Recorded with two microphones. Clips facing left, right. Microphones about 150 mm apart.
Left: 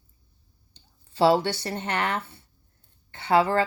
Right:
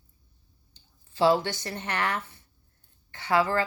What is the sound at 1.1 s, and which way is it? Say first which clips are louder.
Speech: left 2 dB; 30° left (ahead or behind).